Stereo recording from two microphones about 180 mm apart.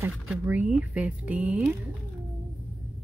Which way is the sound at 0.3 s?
5° right (ahead or behind).